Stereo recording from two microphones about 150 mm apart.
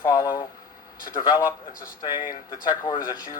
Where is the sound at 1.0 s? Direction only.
70° left (ahead or behind).